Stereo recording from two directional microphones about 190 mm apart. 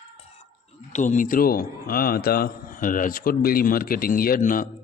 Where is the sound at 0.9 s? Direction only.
40° left (ahead or behind).